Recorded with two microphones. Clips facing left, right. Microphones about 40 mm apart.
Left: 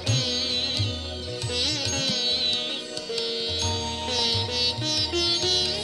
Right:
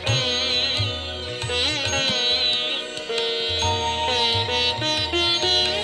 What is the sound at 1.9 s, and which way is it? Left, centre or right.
Music, right.